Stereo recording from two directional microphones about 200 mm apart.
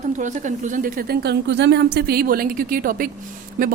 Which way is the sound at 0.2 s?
40° right (ahead or behind).